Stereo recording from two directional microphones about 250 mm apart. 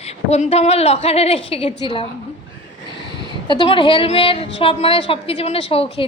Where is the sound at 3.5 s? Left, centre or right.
Centre.